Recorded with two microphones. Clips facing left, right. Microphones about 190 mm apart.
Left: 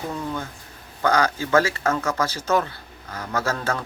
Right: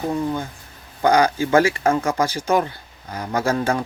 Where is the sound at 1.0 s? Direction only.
15° right (ahead or behind).